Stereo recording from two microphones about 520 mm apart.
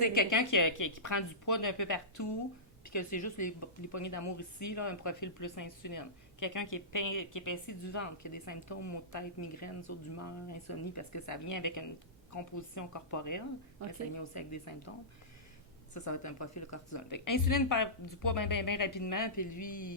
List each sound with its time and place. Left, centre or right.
0.0 s speech: left
16.0 s speech: left